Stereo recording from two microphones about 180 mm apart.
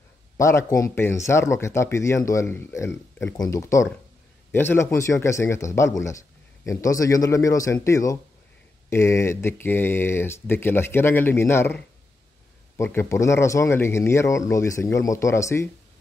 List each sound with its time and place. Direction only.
0.4 s speech: 15° left (ahead or behind)